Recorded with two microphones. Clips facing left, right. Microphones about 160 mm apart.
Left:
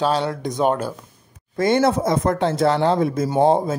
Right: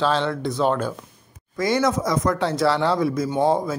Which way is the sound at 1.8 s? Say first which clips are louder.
Left 3 dB; 30° left (ahead or behind).